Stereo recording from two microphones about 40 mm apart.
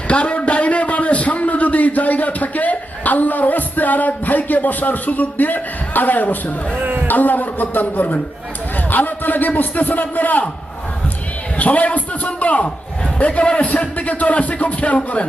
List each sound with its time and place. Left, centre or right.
0.1 s a sound: left
6.7 s speech: right
7.1 s a man's voice: left
11.6 s music: left
13.1 s a man's voice: left
13.4 s a man's voice: left
13.7 s music: left